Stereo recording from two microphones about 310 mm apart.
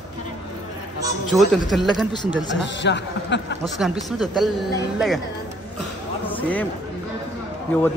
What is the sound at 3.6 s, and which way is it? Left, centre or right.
A man's voice, centre.